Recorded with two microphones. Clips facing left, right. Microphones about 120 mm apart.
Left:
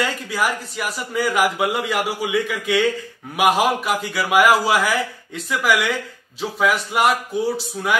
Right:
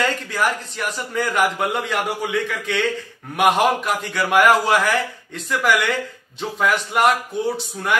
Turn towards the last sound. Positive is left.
turn(degrees=5)  # may be behind; listen again after turning